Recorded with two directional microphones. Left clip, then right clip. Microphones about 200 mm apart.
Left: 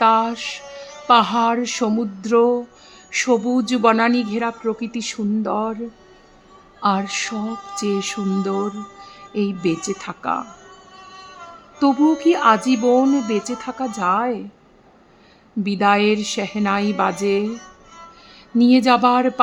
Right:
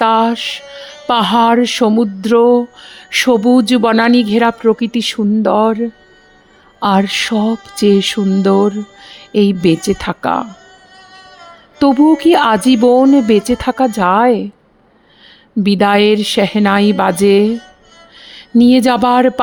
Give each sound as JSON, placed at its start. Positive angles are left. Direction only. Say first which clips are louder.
{"t": 0.0, "sound": "music", "louder": "right 4 dB", "side_deg": -35}
{"t": 11.8, "sound": "music", "louder": "right 7 dB", "side_deg": -40}
{"t": 15.6, "sound": "music", "louder": "right 6 dB", "side_deg": -40}